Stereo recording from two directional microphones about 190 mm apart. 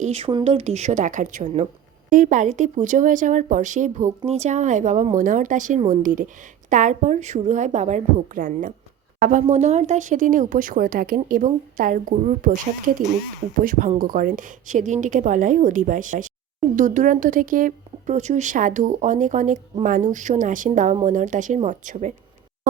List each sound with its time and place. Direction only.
0.0 s a woman's voice: 30° right (ahead or behind)
13.7 s a woman's voice: 45° right (ahead or behind)